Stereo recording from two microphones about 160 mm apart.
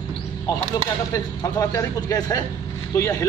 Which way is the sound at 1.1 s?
20° left (ahead or behind).